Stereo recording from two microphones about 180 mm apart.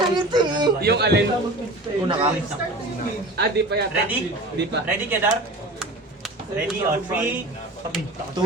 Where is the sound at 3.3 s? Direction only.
65° right (ahead or behind).